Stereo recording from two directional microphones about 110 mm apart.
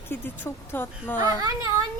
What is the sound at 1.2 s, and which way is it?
Speech, 35° right (ahead or behind).